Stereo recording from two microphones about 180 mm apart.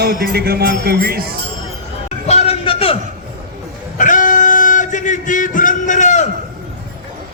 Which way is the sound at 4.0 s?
45° left (ahead or behind).